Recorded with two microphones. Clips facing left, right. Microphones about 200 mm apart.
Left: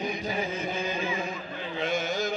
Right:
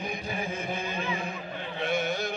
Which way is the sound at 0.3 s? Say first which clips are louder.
Left 2 dB; 55° right (ahead or behind).